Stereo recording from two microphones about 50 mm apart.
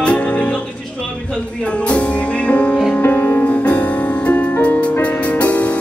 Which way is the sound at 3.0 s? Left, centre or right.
Left.